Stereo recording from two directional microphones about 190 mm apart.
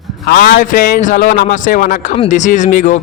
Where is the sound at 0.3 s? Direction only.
55° left (ahead or behind).